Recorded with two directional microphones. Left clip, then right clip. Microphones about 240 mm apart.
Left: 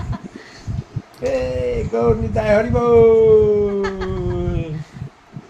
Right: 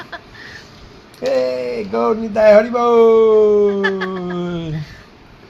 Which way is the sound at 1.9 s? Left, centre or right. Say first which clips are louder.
Right 3 dB; right.